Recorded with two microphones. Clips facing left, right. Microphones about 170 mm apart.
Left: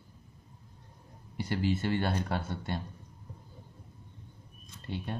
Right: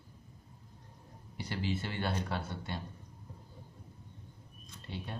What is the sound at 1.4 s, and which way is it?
Speech, 50° left (ahead or behind).